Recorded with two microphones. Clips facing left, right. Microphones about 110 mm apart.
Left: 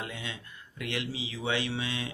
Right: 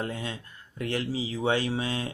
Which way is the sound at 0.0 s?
40° right (ahead or behind).